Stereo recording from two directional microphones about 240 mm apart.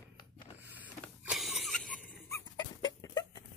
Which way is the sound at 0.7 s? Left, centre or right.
Centre.